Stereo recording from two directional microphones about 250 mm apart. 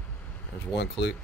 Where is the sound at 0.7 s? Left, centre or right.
Left.